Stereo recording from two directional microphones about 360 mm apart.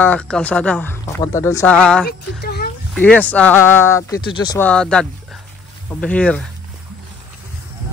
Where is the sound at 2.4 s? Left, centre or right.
Left.